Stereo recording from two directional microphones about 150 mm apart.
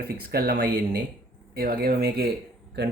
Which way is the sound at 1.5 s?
90° right.